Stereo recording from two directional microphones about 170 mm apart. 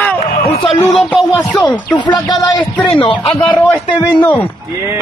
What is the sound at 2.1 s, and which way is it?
Speech, 20° left (ahead or behind).